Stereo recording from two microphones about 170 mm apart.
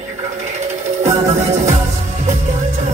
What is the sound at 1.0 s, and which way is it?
Music, 45° right (ahead or behind).